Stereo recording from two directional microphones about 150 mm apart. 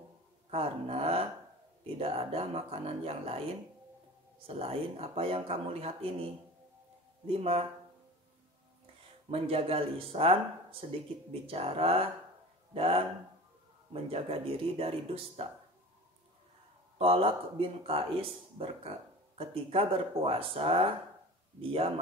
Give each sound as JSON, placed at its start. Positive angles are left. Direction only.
{"t": 0.5, "sound": "speech", "side_deg": -40}
{"t": 4.5, "sound": "speech", "side_deg": -40}
{"t": 7.2, "sound": "speech", "side_deg": -40}
{"t": 9.3, "sound": "speech", "side_deg": -40}
{"t": 14.0, "sound": "speech", "side_deg": -40}
{"t": 17.0, "sound": "speech", "side_deg": -40}